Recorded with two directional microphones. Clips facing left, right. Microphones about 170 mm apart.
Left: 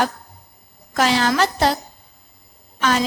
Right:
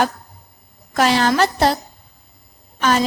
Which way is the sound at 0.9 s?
40° right (ahead or behind).